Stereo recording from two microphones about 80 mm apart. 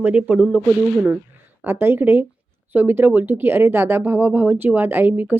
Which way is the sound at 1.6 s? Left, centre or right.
Right.